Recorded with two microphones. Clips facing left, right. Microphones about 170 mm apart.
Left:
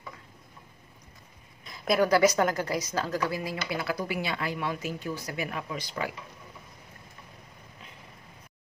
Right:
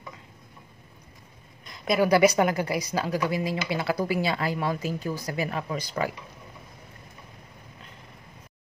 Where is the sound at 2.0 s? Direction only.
15° right (ahead or behind); by 6.1 s 40° right (ahead or behind).